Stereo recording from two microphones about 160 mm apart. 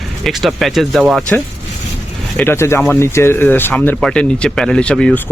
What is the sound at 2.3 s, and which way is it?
Speech, 15° left (ahead or behind).